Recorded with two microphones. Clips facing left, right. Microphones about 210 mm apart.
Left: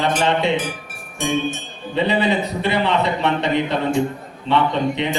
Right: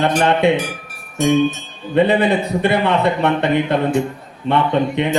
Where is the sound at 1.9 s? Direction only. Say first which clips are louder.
Right 4 dB; 55° right (ahead or behind).